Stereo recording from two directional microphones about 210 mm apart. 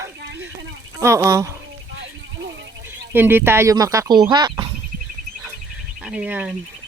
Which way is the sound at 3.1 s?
10° right (ahead or behind).